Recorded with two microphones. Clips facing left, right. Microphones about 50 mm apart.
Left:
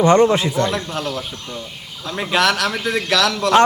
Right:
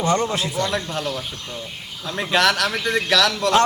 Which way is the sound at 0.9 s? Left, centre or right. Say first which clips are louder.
Left 2 dB; centre.